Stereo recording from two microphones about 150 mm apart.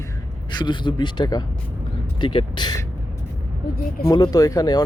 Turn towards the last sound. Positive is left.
turn(degrees=25)  # may be behind; listen again after turning